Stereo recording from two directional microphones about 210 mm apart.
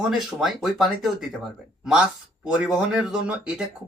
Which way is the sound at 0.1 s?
Centre (ahead or behind).